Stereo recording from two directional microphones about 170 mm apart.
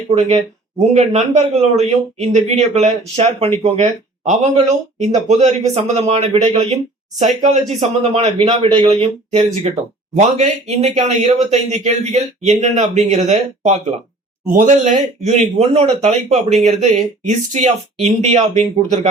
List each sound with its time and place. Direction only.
0.1 s speech: 35° right (ahead or behind)